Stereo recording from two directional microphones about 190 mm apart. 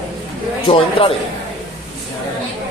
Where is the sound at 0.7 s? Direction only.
30° left (ahead or behind).